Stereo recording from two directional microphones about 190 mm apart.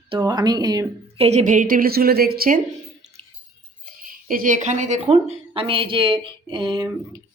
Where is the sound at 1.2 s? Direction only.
35° right (ahead or behind).